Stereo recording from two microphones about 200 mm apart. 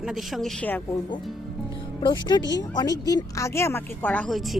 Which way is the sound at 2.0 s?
20° left (ahead or behind).